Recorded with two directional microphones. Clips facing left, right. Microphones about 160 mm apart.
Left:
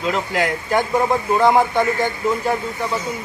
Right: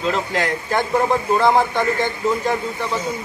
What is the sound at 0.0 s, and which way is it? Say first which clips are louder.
A man's voice: even; 10° left (ahead or behind).